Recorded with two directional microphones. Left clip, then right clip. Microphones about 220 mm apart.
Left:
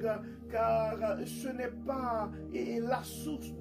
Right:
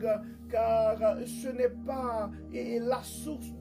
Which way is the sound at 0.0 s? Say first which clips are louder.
Right 4 dB; 40° right (ahead or behind).